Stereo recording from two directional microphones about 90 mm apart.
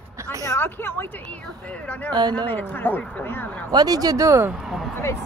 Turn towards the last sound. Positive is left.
turn(degrees=0)  # may be behind; listen again after turning